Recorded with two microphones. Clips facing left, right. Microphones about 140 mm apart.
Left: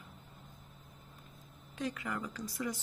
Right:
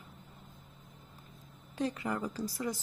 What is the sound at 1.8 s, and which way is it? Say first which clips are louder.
Speech: right 4 dB; 35° right (ahead or behind).